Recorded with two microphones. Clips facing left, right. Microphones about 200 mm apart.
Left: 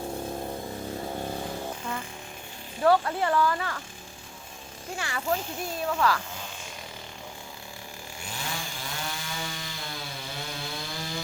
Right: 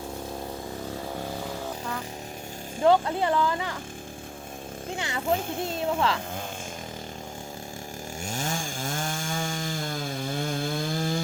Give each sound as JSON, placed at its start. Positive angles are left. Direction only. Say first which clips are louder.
{"t": 2.8, "sound": "speech", "louder": "right 1 dB", "side_deg": -20}
{"t": 4.9, "sound": "speech", "louder": "right 2 dB", "side_deg": -20}
{"t": 8.2, "sound": "chainsaw", "louder": "right 5 dB", "side_deg": -45}